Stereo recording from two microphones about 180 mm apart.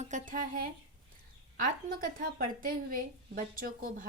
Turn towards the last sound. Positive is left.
turn(degrees=-50)  # may be behind; listen again after turning